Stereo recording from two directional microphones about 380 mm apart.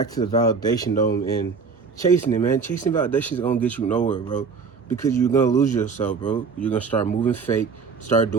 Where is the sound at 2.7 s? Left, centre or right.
Centre.